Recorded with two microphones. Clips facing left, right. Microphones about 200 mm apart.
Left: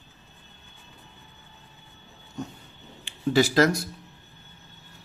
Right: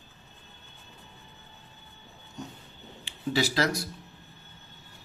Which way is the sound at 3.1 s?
50° left (ahead or behind).